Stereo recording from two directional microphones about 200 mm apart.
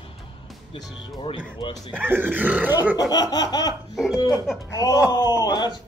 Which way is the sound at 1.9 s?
10° right (ahead or behind).